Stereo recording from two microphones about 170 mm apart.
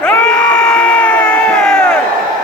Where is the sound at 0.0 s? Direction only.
5° left (ahead or behind).